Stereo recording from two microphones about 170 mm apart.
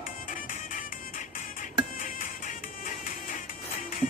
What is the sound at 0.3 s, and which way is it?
Music, 50° left (ahead or behind).